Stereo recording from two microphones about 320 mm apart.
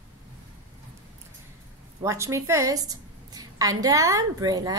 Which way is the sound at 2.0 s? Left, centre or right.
Centre.